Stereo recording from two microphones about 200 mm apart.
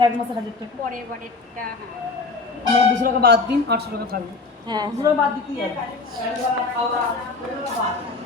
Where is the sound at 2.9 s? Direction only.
45° right (ahead or behind).